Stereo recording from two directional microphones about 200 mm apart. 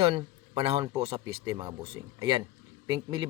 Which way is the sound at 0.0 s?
25° right (ahead or behind).